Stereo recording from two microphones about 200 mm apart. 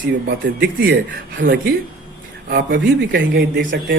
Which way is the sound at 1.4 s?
55° right (ahead or behind).